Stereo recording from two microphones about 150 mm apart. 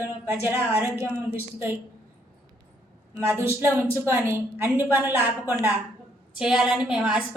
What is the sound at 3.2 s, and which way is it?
A woman's voice, 15° right (ahead or behind).